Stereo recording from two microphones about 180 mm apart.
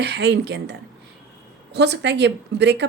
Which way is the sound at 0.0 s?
70° right (ahead or behind).